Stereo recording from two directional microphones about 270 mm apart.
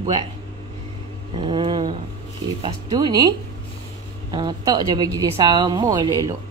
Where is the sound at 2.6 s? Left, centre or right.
Centre.